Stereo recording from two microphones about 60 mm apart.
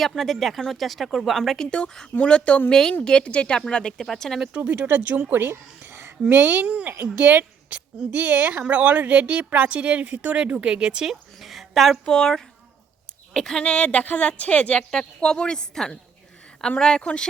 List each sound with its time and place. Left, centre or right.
0.0 s speech: centre
1.7 s a woman's voice: centre
4.5 s speech: right
5.4 s a sound: right
6.2 s a woman's voice: right; by 17.2 s centre